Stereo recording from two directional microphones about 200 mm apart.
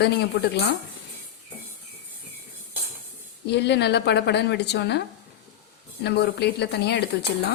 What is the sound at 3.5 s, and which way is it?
Speech, 55° left (ahead or behind).